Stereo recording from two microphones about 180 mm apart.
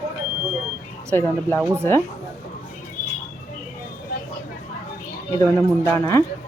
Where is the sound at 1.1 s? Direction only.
10° left (ahead or behind).